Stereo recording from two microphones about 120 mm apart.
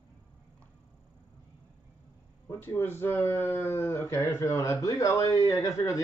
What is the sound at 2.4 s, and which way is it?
Speech, 20° left (ahead or behind).